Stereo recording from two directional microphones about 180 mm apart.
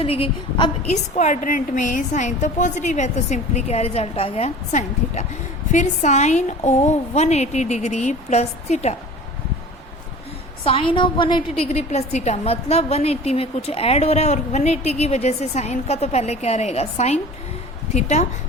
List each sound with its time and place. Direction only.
0.0 s a woman's voice: 30° left (ahead or behind)
1.1 s a woman's voice: 40° left (ahead or behind)
10.6 s a woman's voice: 30° left (ahead or behind)